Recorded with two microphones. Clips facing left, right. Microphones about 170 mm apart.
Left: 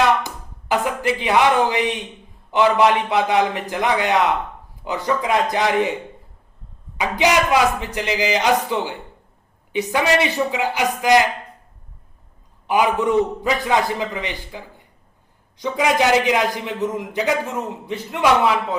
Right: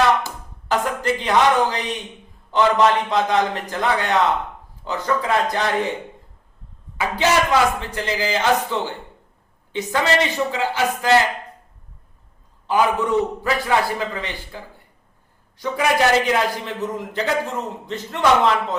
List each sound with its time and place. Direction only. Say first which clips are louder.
0.2 s a man's voice: left 1 dB; 15° left (ahead or behind)
6.9 s a man's voice: left 1 dB; 15° left (ahead or behind)
12.6 s a man's voice: left 1 dB; 15° left (ahead or behind)